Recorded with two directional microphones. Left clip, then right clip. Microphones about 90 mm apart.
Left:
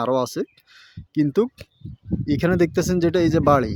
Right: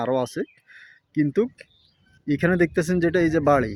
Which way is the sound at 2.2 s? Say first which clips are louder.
Left 1 dB; 20° left (ahead or behind).